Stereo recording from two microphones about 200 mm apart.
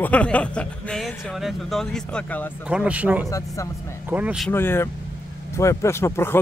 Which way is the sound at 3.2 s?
15° left (ahead or behind).